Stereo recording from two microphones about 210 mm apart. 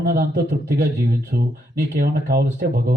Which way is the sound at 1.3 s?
35° right (ahead or behind).